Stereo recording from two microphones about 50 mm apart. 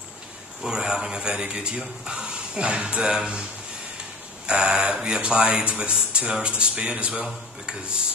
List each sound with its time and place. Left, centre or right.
0.7 s speech: centre
4.5 s speech: centre